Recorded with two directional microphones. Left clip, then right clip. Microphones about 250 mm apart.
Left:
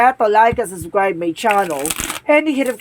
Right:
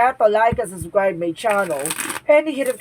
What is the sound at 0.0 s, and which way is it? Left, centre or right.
A woman's voice, left.